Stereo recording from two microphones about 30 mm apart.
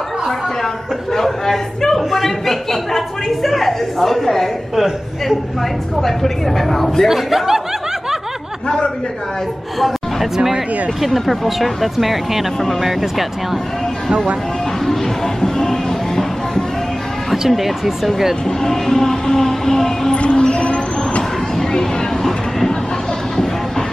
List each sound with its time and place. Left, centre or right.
1.1 s a woman's voice: centre
2.0 s a woman's voice: centre
5.9 s a woman's voice: centre
7.1 s speech: centre
8.6 s a man's voice: left
9.8 s speech: centre
14.9 s music: centre
17.5 s speech: centre
18.6 s a woman's voice: centre
20.2 s a sound: left
21.5 s a sound: centre